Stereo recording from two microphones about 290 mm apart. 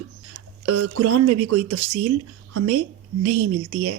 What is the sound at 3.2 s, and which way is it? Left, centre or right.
Speech, right.